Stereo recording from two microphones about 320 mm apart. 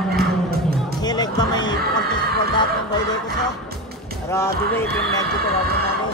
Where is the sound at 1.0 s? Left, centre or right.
Centre.